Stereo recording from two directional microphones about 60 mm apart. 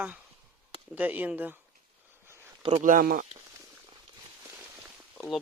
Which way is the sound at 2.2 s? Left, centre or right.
Right.